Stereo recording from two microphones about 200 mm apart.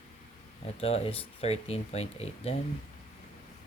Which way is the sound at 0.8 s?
30° left (ahead or behind).